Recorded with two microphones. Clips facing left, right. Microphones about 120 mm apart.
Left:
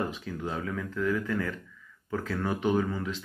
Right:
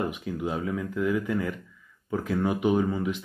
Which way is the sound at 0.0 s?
15° right (ahead or behind).